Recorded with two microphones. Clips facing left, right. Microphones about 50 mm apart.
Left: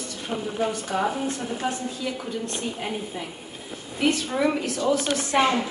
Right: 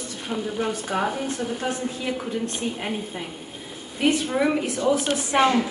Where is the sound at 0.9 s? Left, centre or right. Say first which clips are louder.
Right 1 dB; right.